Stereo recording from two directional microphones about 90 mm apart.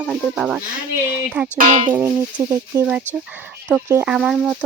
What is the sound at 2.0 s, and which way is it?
Speech, 30° right (ahead or behind).